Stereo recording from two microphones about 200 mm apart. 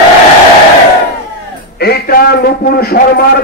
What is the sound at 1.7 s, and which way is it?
A man's voice, 50° left (ahead or behind).